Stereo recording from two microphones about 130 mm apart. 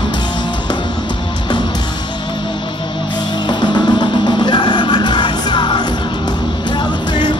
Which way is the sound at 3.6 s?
35° left (ahead or behind).